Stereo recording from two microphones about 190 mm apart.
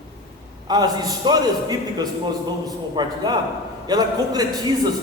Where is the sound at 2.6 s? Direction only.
20° right (ahead or behind).